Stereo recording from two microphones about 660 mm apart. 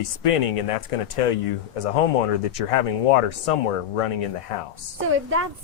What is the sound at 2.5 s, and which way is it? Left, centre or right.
Speech, left.